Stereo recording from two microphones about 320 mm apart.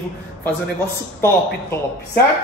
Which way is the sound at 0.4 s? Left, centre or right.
Centre.